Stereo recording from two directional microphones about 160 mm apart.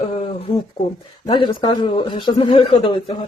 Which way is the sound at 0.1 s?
45° left (ahead or behind).